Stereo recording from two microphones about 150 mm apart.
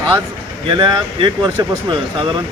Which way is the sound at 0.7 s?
30° right (ahead or behind).